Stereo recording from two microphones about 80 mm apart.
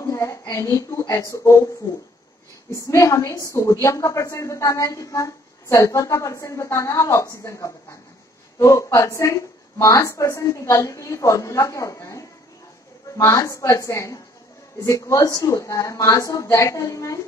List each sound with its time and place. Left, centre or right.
0.0 s a woman's voice: left
2.7 s a woman's voice: left